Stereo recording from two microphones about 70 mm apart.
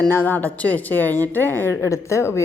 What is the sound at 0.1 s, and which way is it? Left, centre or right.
A woman's voice, left.